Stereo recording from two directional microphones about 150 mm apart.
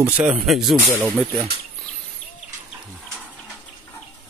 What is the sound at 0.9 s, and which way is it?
Speech, 20° right (ahead or behind).